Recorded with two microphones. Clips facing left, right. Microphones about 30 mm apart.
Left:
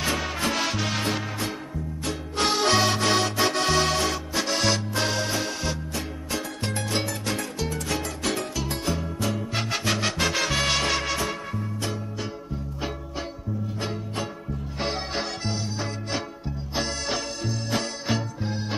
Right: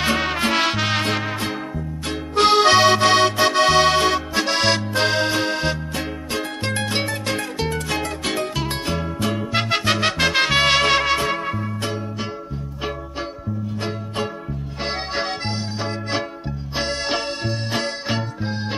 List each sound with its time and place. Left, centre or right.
0.0 s music: right
2.0 s accordion: right
13.8 s music: right